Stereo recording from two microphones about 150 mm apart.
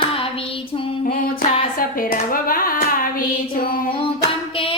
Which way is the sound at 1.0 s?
70° left (ahead or behind).